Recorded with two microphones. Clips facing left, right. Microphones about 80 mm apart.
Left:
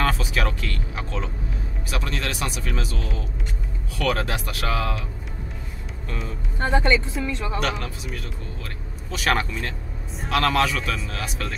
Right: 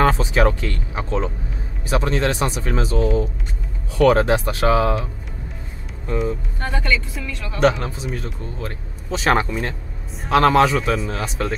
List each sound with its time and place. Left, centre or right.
0.0 s speech: right
6.6 s speech: left
7.6 s speech: right